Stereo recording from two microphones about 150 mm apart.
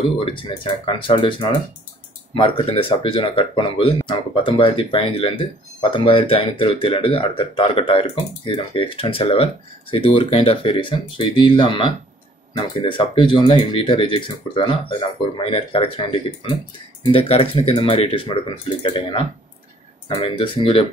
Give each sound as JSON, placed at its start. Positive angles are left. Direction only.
{"t": 0.2, "sound": "speech", "side_deg": 35}